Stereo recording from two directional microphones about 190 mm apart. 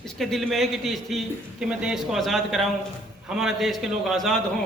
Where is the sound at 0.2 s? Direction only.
Centre (ahead or behind).